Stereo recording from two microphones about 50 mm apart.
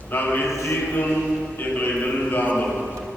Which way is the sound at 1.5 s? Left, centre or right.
Left.